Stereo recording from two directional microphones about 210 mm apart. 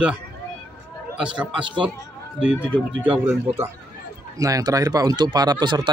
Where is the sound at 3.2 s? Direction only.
10° right (ahead or behind).